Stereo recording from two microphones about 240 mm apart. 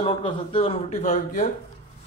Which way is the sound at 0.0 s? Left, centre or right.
Left.